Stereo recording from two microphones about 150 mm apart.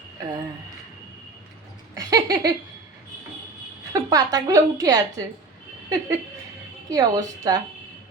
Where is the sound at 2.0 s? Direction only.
25° right (ahead or behind).